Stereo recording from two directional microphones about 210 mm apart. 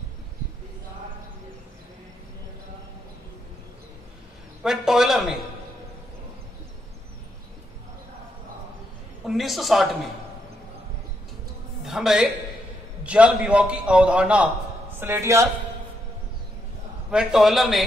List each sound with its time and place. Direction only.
4.6 s a man's voice: centre (ahead or behind)
9.2 s a man's voice: centre (ahead or behind)
11.8 s a man's voice: centre (ahead or behind)
17.1 s a man's voice: 5° right (ahead or behind)